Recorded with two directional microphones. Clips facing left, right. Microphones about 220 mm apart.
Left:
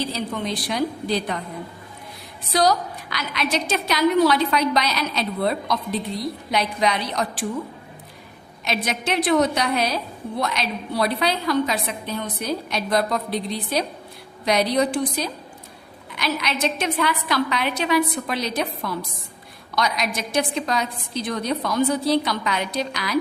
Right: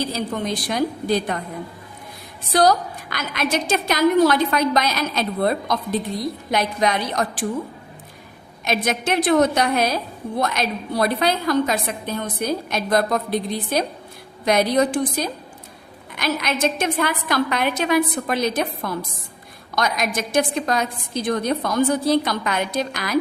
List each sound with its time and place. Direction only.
0.0 s a woman's voice: 45° right (ahead or behind)
2.5 s a woman's voice: 50° right (ahead or behind)
8.6 s a woman's voice: 50° right (ahead or behind)